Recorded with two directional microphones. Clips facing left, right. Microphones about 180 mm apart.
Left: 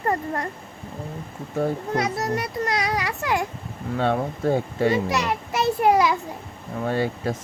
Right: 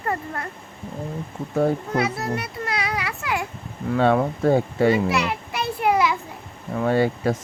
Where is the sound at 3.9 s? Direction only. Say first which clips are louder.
Right 4 dB; 90° right.